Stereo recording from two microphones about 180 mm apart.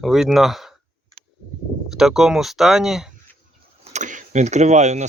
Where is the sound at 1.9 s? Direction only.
5° right (ahead or behind).